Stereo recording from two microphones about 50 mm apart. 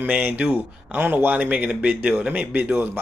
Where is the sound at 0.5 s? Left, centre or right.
Right.